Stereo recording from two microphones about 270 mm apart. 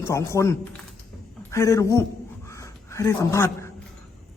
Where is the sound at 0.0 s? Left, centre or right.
Centre.